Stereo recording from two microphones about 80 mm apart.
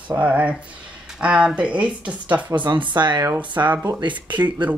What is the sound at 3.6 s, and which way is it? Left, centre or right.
Speech, right.